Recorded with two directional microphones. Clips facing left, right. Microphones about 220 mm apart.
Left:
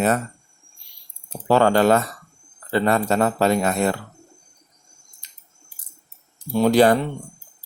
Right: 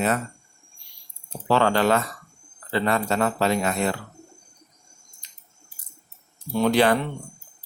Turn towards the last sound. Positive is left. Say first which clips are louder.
# left 4 dB
turn(degrees=40)  # may be behind; listen again after turning